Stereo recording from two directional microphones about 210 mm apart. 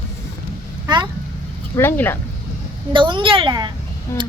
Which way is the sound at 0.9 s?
20° right (ahead or behind).